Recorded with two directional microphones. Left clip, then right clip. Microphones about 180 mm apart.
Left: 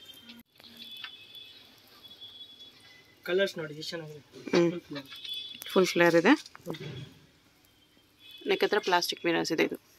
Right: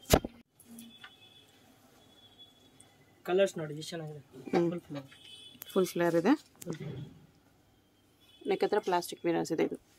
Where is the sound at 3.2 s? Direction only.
35° right (ahead or behind).